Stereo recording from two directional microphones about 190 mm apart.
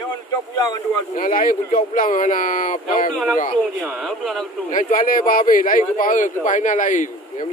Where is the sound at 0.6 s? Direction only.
20° left (ahead or behind).